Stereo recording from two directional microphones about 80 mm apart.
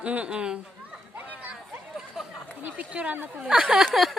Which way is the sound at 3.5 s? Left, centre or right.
Centre.